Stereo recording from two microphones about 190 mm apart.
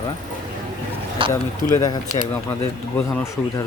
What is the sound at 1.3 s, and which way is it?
Speech, 15° left (ahead or behind).